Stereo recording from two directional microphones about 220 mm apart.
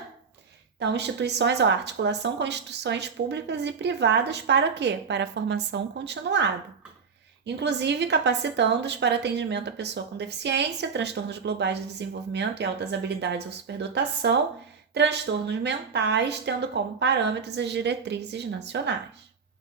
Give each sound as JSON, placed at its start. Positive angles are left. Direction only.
{"t": 0.8, "sound": "speech", "side_deg": -50}